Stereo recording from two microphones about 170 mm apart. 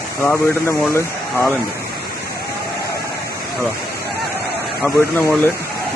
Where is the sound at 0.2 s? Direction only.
15° left (ahead or behind).